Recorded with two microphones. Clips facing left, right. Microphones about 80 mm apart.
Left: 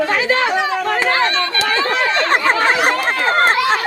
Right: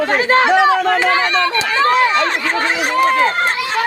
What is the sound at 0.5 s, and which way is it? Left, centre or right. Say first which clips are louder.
Speech: right 6 dB; right.